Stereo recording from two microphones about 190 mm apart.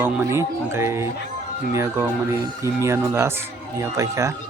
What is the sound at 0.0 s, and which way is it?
Speech, 10° right (ahead or behind).